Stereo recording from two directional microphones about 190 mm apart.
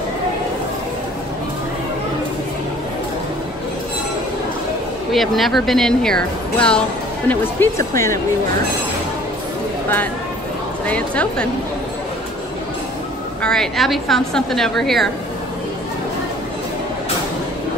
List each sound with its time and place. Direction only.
5.1 s speech: centre (ahead or behind)
10.9 s speech: 5° left (ahead or behind)
13.4 s speech: 5° left (ahead or behind)